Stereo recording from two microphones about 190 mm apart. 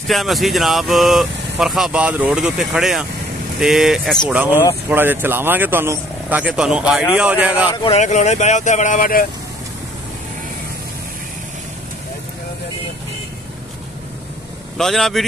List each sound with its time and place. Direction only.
0.1 s speech: centre (ahead or behind)
7.7 s speech: 25° left (ahead or behind)
8.0 s speech: 40° left (ahead or behind)
14.8 s speech: centre (ahead or behind)